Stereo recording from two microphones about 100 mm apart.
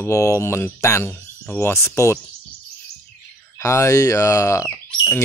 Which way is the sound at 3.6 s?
30° left (ahead or behind).